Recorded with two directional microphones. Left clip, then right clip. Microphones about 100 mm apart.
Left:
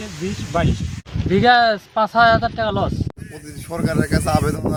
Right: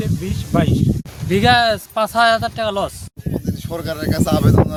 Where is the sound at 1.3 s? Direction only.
20° right (ahead or behind).